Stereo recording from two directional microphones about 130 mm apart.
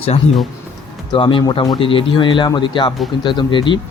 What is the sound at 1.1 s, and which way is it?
Speech, 40° left (ahead or behind).